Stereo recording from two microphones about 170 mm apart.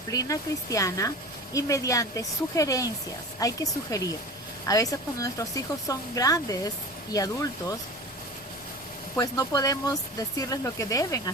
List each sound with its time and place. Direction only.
0.1 s speech: 20° left (ahead or behind)
9.1 s speech: 20° left (ahead or behind)